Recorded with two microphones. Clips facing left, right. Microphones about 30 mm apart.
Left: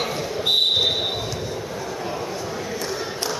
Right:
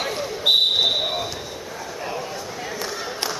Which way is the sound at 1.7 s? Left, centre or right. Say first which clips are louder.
Left 2 dB; centre.